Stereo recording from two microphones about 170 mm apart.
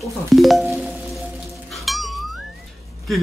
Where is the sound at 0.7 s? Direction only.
Centre (ahead or behind).